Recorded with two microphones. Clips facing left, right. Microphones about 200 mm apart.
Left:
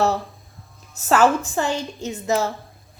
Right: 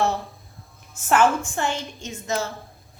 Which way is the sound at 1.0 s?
35° left (ahead or behind).